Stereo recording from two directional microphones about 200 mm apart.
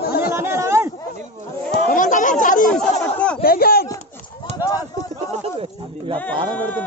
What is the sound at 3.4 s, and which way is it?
Speech, 50° left (ahead or behind).